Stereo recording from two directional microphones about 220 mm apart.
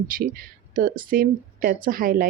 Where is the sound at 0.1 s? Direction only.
40° right (ahead or behind).